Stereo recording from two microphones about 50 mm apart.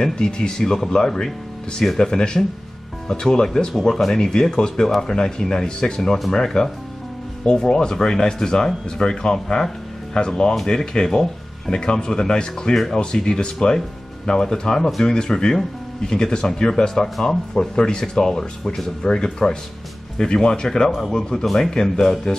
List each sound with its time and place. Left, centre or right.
0.0 s speech: centre